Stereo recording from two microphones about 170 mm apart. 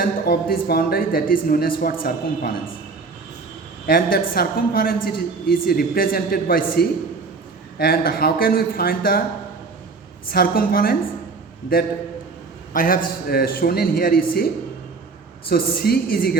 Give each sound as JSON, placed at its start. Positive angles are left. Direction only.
{"t": 0.0, "sound": "a woman's voice", "side_deg": 60}
{"t": 3.8, "sound": "a woman's voice", "side_deg": 60}
{"t": 10.3, "sound": "a woman's voice", "side_deg": 60}
{"t": 12.7, "sound": "a woman's voice", "side_deg": 55}
{"t": 15.4, "sound": "a woman's voice", "side_deg": 65}